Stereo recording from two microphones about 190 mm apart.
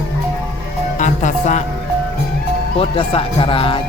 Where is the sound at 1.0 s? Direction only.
40° left (ahead or behind).